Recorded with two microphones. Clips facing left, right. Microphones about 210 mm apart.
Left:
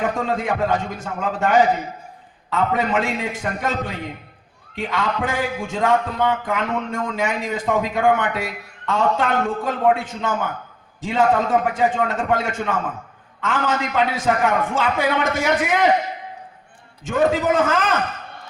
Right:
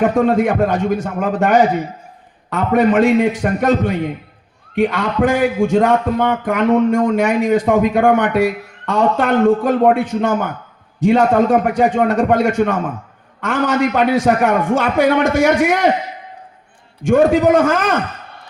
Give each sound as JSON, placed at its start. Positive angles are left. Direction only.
{"t": 0.0, "sound": "a man's voice", "side_deg": -50}
{"t": 17.1, "sound": "a man's voice", "side_deg": -50}